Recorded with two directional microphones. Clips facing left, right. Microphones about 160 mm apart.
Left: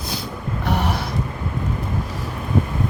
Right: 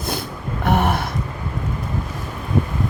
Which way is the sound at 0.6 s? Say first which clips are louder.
Right 4 dB; 55° right (ahead or behind).